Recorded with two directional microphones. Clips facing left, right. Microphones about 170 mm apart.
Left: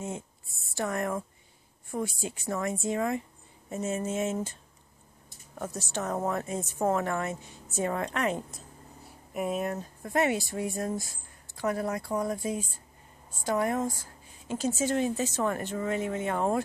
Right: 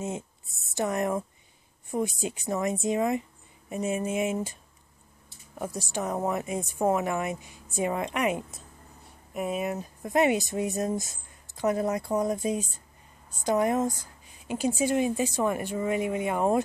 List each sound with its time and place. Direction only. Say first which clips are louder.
0.7 s speech: right 3 dB; 20° right (ahead or behind)
5.6 s a woman's voice: right 2 dB; 10° right (ahead or behind)
10.0 s speech: right 3 dB; 20° right (ahead or behind)